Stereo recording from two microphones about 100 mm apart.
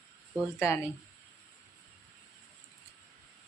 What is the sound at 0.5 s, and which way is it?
Speech, 25° left (ahead or behind).